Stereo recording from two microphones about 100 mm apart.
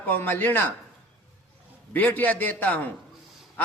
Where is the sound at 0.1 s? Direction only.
20° left (ahead or behind).